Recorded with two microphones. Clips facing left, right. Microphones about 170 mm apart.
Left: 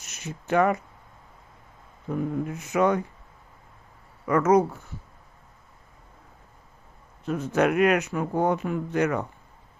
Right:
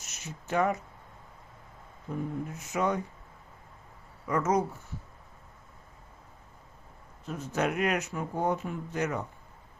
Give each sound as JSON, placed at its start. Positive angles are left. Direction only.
{"t": 0.0, "sound": "speech", "side_deg": 60}
{"t": 2.0, "sound": "speech", "side_deg": 70}
{"t": 4.3, "sound": "speech", "side_deg": 65}
{"t": 7.3, "sound": "speech", "side_deg": 65}